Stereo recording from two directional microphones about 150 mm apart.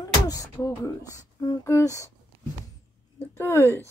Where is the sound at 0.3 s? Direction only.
20° left (ahead or behind).